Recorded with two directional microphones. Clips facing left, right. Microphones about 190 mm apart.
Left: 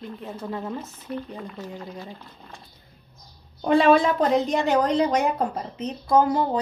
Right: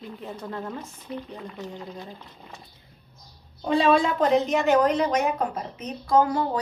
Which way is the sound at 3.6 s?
55° left (ahead or behind).